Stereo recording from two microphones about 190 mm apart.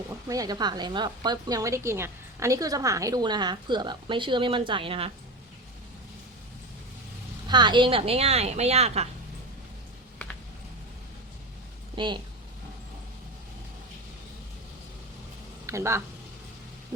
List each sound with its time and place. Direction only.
0.3 s a woman's voice: 20° right (ahead or behind)
7.4 s a woman's voice: 25° right (ahead or behind)
11.9 s a woman's voice: 25° right (ahead or behind)
15.6 s speech: 15° right (ahead or behind)